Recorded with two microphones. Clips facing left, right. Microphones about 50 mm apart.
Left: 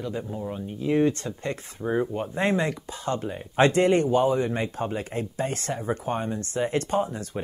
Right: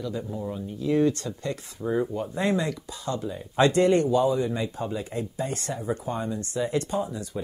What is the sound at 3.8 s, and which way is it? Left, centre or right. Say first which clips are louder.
Speech: even; left.